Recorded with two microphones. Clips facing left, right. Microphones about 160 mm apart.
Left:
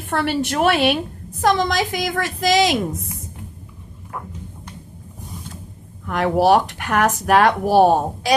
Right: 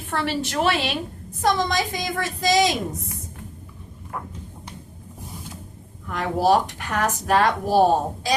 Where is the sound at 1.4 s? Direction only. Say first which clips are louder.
Left 3 dB; 80° left.